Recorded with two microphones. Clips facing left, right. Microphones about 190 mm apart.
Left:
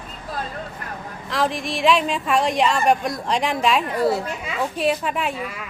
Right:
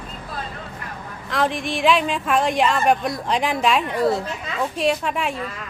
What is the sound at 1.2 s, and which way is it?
A woman's voice, centre (ahead or behind).